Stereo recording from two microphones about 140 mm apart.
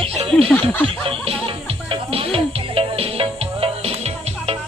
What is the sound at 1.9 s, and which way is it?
Music, 40° right (ahead or behind).